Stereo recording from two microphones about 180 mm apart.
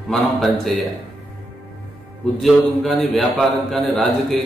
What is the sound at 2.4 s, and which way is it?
A man's voice, centre (ahead or behind).